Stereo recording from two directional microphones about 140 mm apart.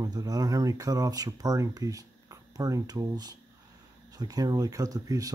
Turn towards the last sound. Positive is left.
turn(degrees=-25)  # may be behind; listen again after turning